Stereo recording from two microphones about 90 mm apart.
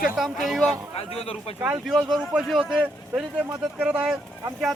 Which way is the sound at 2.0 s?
Centre (ahead or behind).